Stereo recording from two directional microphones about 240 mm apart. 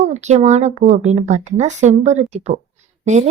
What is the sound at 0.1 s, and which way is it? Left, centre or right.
A woman's voice, right.